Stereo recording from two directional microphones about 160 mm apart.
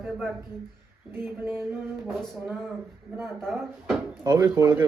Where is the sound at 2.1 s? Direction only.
Centre (ahead or behind).